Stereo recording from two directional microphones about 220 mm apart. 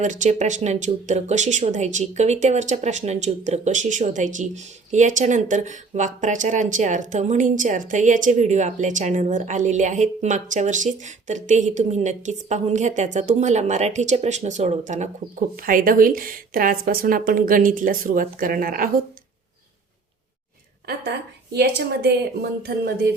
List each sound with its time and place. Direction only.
0.0 s speech: 35° right (ahead or behind)
20.8 s speech: 45° right (ahead or behind)